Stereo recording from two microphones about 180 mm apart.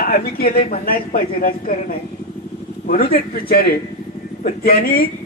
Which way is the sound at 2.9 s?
55° left (ahead or behind).